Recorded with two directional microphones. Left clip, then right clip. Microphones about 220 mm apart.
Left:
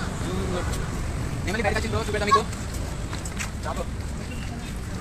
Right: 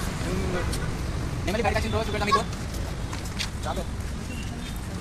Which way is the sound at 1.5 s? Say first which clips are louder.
Even; 55° right (ahead or behind).